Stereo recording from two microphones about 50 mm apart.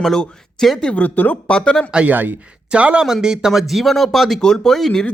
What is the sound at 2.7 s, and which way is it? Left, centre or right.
Speech, right.